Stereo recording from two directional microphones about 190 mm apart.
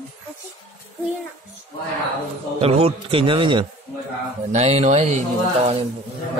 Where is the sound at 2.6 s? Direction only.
30° right (ahead or behind).